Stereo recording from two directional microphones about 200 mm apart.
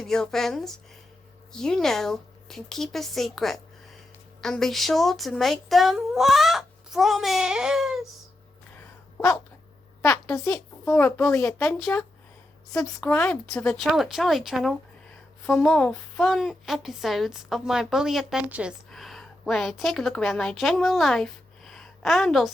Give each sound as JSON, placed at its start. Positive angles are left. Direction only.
{"t": 0.0, "sound": "a woman's voice", "side_deg": 0}
{"t": 10.0, "sound": "a woman's voice", "side_deg": 15}
{"t": 11.6, "sound": "a woman's voice", "side_deg": 0}